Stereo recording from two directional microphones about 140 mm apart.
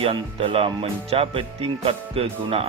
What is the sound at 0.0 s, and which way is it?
Speech, 40° right (ahead or behind).